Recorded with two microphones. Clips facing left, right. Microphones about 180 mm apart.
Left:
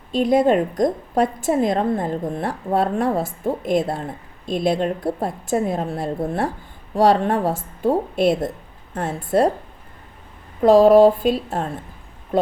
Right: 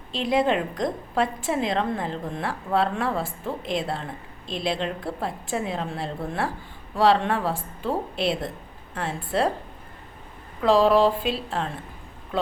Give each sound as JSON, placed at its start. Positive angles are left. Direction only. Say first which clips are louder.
{"t": 0.1, "sound": "a woman's voice", "louder": "left 6 dB", "side_deg": 45}
{"t": 10.6, "sound": "a woman's voice", "louder": "left 7 dB", "side_deg": 45}